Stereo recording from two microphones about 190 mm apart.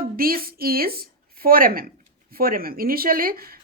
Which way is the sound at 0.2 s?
50° right (ahead or behind).